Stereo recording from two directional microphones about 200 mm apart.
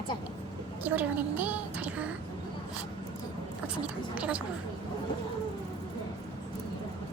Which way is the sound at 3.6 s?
5° right (ahead or behind).